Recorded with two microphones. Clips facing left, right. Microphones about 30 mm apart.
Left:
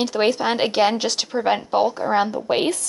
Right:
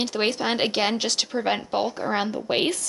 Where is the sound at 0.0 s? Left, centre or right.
Centre.